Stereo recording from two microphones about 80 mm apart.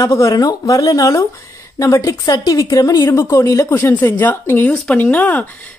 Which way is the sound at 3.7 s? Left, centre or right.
Left.